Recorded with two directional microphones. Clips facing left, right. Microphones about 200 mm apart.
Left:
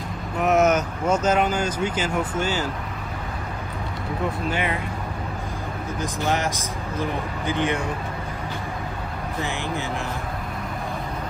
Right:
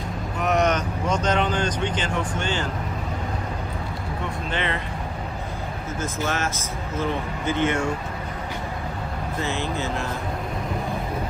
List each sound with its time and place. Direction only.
0.4 s speech: 5° left (ahead or behind)
4.5 s speech: 10° left (ahead or behind)
6.0 s speech: 15° left (ahead or behind)
9.4 s speech: 15° left (ahead or behind)